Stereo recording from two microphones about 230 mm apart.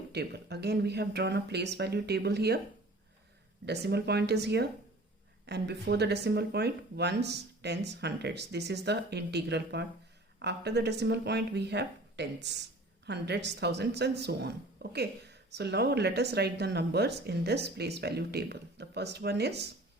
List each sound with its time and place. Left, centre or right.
0.1 s speech: right
3.7 s speech: right